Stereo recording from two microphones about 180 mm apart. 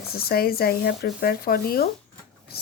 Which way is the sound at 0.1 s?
60° left (ahead or behind).